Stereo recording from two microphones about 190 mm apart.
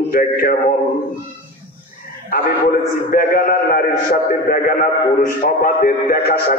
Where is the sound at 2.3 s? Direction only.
50° left (ahead or behind).